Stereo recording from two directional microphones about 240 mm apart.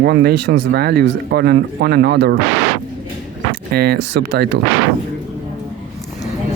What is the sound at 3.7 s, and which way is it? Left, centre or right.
Speech, right.